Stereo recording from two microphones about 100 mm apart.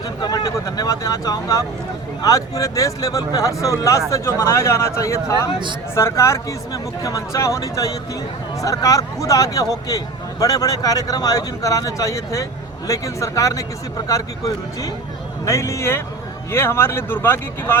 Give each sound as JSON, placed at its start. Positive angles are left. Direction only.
{"t": 0.0, "sound": "speech", "side_deg": 40}